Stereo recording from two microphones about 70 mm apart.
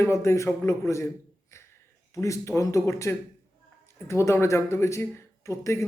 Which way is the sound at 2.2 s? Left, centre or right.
Left.